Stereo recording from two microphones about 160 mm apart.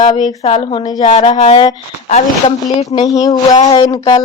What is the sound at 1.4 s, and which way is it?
Speech, 45° left (ahead or behind).